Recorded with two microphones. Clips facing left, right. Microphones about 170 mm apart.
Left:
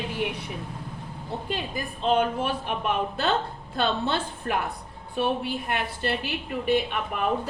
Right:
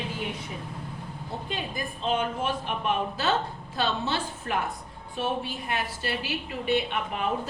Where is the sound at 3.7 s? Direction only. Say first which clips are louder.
Left 3 dB; 55° left (ahead or behind).